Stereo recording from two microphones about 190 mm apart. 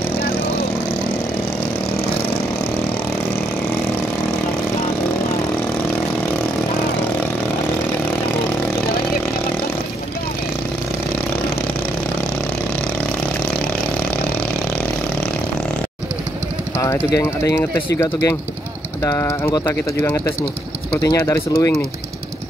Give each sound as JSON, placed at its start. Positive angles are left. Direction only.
{"t": 16.7, "sound": "speech", "side_deg": 15}